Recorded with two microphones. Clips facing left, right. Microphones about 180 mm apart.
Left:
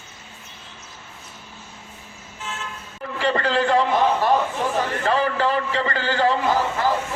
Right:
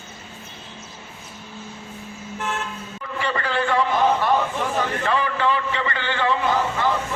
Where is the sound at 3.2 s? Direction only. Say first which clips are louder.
Left 4 dB; 35° left (ahead or behind).